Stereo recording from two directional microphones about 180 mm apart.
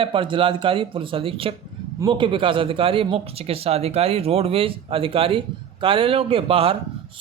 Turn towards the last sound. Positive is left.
turn(degrees=-30)  # may be behind; listen again after turning